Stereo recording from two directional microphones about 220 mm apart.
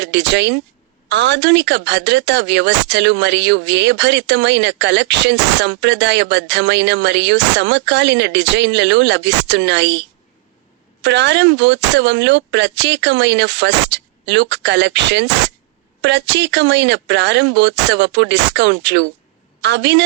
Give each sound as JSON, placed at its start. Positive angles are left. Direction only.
{"t": 0.0, "sound": "speech", "side_deg": -50}